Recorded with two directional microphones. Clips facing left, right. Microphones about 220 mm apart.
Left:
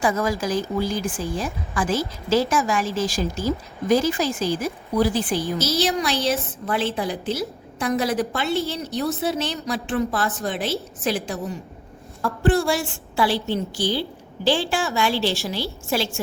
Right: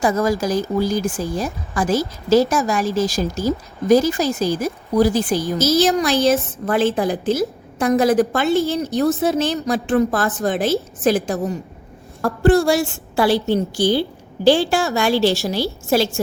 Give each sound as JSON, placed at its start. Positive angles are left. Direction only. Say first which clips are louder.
{"t": 0.0, "sound": "a woman's voice", "louder": "right 4 dB", "side_deg": -40}